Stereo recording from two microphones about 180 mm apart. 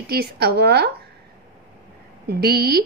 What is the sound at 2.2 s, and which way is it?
Speech, 60° right (ahead or behind).